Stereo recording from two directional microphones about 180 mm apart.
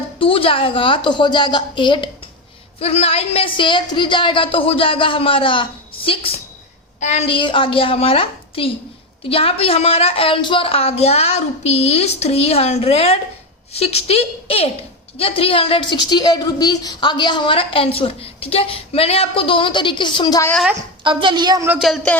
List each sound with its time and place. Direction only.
0.2 s a woman's voice: 30° left (ahead or behind)
21.0 s speech: 25° right (ahead or behind)
21.7 s speech: centre (ahead or behind)